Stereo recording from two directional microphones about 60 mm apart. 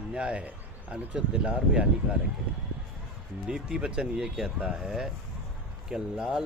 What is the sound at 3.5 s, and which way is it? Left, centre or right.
Speech, centre.